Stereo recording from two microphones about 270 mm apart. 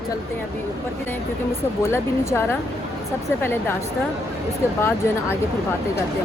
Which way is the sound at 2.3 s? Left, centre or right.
Centre.